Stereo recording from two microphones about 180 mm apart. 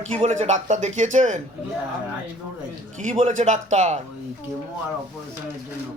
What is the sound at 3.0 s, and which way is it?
Speech, 45° right (ahead or behind).